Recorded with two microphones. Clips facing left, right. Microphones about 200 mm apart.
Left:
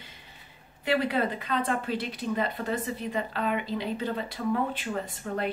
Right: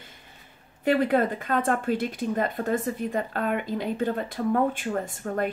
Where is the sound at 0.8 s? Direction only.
50° right (ahead or behind).